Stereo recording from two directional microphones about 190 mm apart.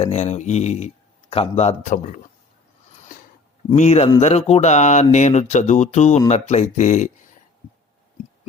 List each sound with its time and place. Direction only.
0.0 s a man's voice: 35° left (ahead or behind)
3.8 s a man's voice: 35° left (ahead or behind)